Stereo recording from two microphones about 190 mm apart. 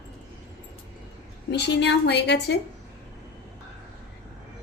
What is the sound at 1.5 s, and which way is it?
Speech, 65° left (ahead or behind).